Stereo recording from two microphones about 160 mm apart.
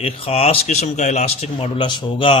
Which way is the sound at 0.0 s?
40° left (ahead or behind).